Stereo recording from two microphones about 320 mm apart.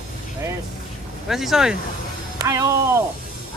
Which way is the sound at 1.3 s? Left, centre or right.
Centre.